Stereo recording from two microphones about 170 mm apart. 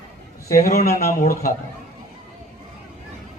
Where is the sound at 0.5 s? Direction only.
55° left (ahead or behind).